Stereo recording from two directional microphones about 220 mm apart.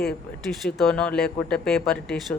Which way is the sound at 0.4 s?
Centre (ahead or behind).